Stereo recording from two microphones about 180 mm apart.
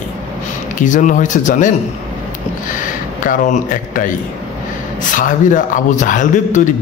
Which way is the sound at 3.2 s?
50° left (ahead or behind).